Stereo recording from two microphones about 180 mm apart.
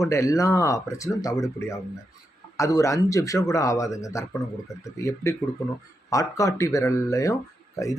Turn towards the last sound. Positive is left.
turn(degrees=20)  # may be behind; listen again after turning